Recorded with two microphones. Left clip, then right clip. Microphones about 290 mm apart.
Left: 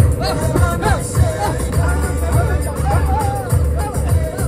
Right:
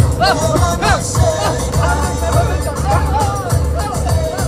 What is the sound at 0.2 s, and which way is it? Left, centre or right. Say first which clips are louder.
Music: right 7 dB; centre.